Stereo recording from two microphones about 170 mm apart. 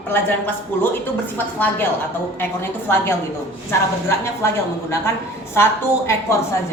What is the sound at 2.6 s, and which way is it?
A woman's voice, 15° left (ahead or behind).